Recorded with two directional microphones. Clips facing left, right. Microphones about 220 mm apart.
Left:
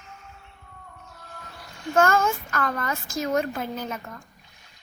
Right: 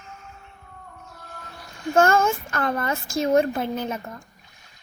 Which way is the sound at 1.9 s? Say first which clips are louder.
Right 2 dB; 25° right (ahead or behind).